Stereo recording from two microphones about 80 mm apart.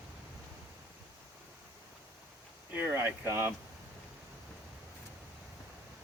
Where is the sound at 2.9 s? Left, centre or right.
Right.